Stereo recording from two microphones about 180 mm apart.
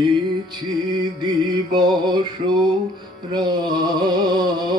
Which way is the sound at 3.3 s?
25° right (ahead or behind).